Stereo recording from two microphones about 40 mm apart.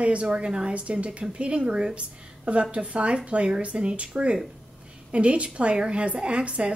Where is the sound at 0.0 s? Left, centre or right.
Right.